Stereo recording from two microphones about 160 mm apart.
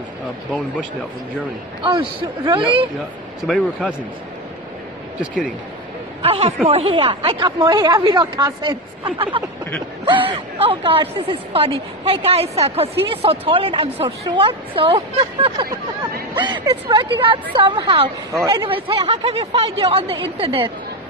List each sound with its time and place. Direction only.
1.8 s speech: 30° right (ahead or behind)
6.2 s speech: 40° right (ahead or behind); by 8.7 s 20° right (ahead or behind)
9.0 s speech: 35° right (ahead or behind)